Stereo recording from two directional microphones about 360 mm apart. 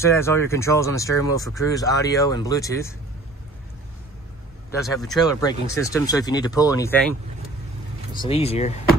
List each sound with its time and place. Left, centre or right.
0.0 s speech: centre
4.6 s speech: centre